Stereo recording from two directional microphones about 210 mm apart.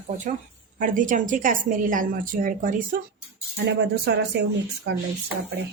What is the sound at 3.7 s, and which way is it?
Speech, 50° right (ahead or behind).